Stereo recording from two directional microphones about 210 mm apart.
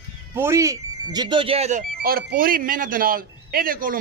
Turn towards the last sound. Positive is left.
turn(degrees=-40)  # may be behind; listen again after turning